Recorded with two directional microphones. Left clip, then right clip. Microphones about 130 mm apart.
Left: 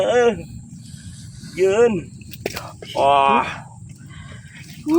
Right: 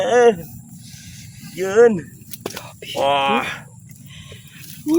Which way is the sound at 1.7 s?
40° right (ahead or behind).